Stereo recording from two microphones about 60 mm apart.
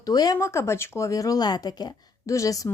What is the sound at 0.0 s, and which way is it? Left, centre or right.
Speech, left.